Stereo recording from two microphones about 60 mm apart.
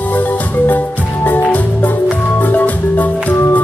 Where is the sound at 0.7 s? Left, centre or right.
Left.